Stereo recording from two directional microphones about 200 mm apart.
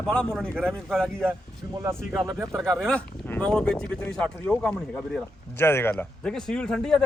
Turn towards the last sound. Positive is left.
turn(degrees=5)  # may be behind; listen again after turning